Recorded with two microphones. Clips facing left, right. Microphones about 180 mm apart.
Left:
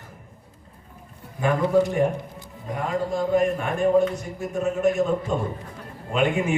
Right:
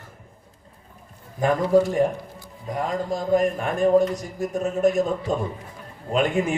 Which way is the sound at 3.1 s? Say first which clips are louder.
Right 1 dB; 40° right (ahead or behind).